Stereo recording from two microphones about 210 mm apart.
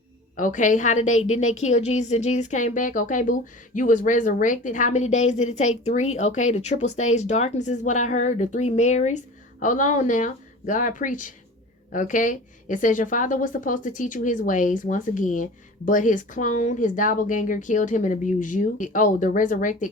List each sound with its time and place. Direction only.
0.3 s speech: 35° left (ahead or behind)